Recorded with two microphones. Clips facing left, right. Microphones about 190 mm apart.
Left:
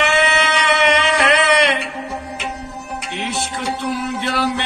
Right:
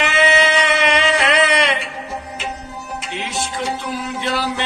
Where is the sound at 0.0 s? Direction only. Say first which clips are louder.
Right 1 dB; 60° left (ahead or behind).